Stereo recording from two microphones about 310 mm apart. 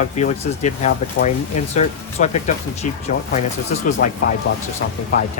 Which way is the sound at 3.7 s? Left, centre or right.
Left.